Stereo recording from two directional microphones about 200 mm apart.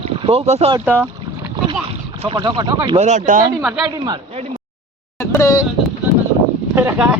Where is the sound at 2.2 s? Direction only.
20° right (ahead or behind); by 3.4 s 40° right (ahead or behind).